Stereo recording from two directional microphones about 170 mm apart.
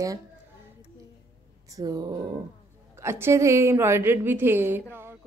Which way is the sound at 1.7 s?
20° right (ahead or behind).